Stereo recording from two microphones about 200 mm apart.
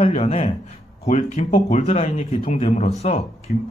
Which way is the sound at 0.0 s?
30° left (ahead or behind).